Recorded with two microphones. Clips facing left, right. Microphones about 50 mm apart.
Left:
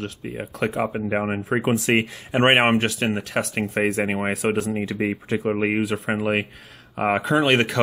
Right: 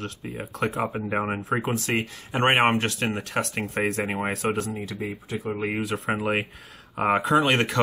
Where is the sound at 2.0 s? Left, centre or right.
Centre.